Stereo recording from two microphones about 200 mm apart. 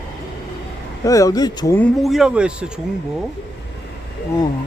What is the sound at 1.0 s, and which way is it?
Speech, 15° left (ahead or behind).